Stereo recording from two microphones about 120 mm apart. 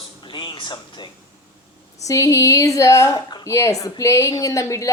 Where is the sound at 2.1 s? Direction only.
25° left (ahead or behind).